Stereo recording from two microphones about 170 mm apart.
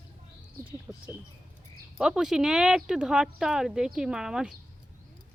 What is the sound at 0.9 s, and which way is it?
Rodents, 5° right (ahead or behind).